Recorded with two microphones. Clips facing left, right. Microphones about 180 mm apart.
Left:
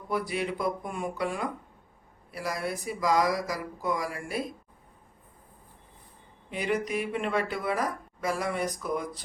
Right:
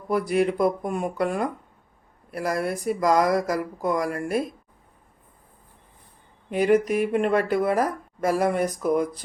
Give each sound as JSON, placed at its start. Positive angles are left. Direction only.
{"t": 0.3, "sound": "a woman's voice", "side_deg": -45}
{"t": 6.5, "sound": "a woman's voice", "side_deg": -50}